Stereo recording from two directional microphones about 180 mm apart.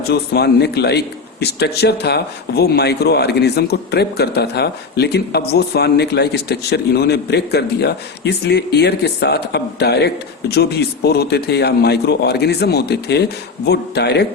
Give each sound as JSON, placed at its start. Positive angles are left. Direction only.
{"t": 0.1, "sound": "a man's voice", "side_deg": 65}